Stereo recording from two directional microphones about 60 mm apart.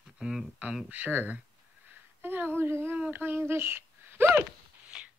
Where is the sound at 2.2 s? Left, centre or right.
Right.